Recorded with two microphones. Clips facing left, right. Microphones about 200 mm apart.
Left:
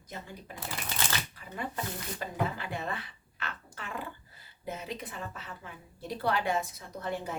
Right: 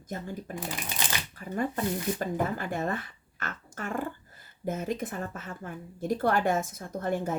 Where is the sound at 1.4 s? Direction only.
45° right (ahead or behind).